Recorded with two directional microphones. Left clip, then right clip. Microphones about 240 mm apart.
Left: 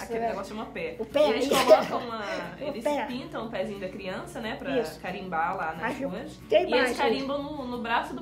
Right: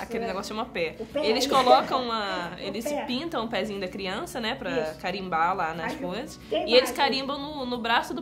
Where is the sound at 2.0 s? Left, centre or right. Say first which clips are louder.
Right 4 dB; right.